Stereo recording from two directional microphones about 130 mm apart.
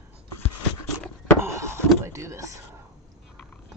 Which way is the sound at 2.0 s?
20° right (ahead or behind).